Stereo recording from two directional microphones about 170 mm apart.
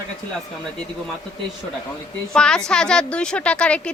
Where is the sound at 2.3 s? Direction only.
5° left (ahead or behind).